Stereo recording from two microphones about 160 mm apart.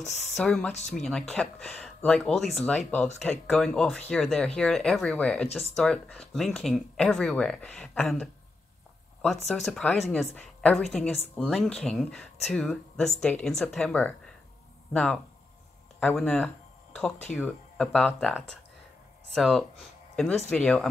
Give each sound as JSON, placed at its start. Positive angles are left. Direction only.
{"t": 0.4, "sound": "speech", "side_deg": 5}
{"t": 9.5, "sound": "speech", "side_deg": 0}
{"t": 19.3, "sound": "speech", "side_deg": 0}